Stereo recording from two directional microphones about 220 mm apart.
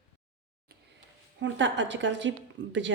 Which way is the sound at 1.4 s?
55° right (ahead or behind).